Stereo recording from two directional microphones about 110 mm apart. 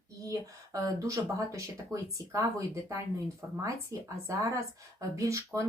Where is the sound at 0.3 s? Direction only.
30° right (ahead or behind).